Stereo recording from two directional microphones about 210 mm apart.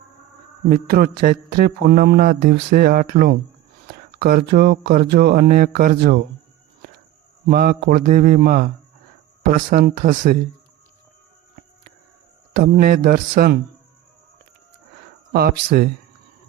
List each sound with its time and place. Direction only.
0.7 s mantra: 45° right (ahead or behind)
7.4 s mantra: 45° right (ahead or behind)
9.5 s speech: 40° right (ahead or behind)
12.5 s mantra: 45° right (ahead or behind)
15.3 s mantra: 45° right (ahead or behind)